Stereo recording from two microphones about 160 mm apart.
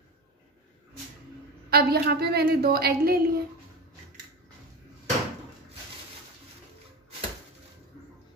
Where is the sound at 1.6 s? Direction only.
75° right (ahead or behind).